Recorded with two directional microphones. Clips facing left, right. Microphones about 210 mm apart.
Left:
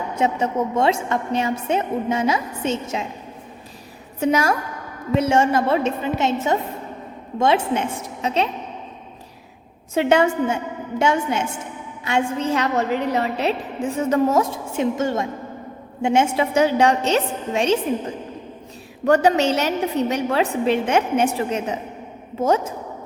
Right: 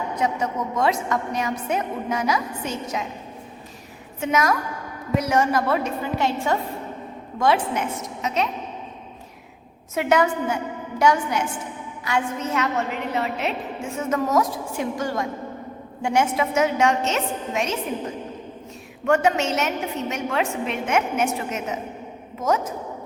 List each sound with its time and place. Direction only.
0.2 s a woman's voice: 25° left (ahead or behind)
4.2 s a woman's voice: 30° left (ahead or behind)
9.9 s a woman's voice: 30° left (ahead or behind)
19.0 s a woman's voice: 35° left (ahead or behind)